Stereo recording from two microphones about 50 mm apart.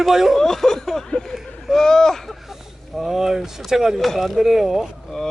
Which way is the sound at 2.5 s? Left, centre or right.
Centre.